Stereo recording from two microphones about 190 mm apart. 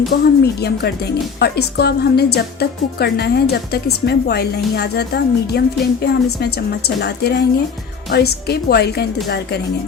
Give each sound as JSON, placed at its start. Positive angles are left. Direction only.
{"t": 0.1, "sound": "speech", "side_deg": 60}